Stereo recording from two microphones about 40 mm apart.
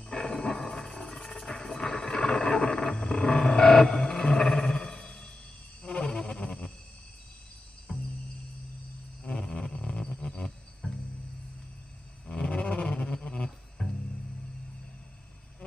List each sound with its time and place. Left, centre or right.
0.0 s wild animals: centre
3.2 s a sound: left
5.8 s music: left
7.9 s music: centre
9.2 s music: centre
12.3 s roar: left
13.0 s a sound: left